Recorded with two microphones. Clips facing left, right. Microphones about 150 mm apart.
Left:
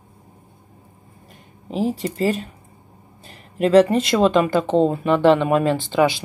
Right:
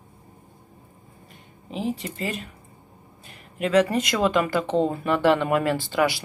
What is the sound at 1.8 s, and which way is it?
Speech, 40° left (ahead or behind).